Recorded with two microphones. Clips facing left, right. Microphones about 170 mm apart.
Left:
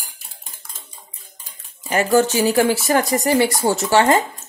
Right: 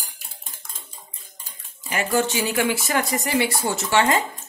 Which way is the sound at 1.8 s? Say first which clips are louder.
Left 6 dB; 40° left (ahead or behind).